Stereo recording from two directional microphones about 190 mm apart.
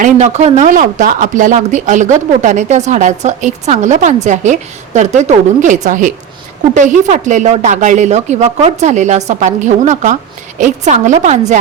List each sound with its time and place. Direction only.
0.0 s speech: 35° right (ahead or behind)